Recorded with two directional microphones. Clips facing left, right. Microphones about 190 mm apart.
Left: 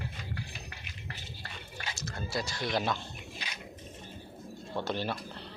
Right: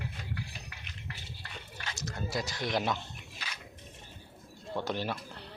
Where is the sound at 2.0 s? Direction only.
15° right (ahead or behind).